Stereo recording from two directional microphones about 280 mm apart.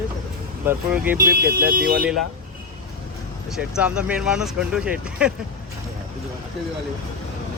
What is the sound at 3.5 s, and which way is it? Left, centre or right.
Speech, centre.